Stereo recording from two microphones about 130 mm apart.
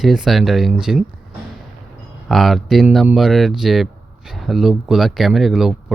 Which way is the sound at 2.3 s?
Centre (ahead or behind).